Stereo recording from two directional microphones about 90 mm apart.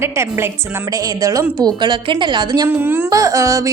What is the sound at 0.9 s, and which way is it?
Speech, 40° right (ahead or behind).